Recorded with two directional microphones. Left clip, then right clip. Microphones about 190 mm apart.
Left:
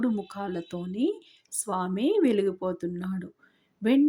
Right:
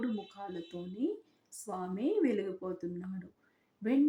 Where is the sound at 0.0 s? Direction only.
25° left (ahead or behind).